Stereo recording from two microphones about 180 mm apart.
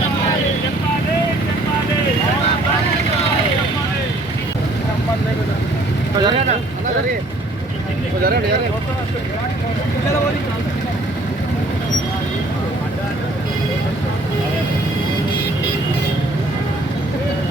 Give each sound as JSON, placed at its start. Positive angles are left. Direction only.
{"t": 6.1, "sound": "vehicle", "side_deg": -25}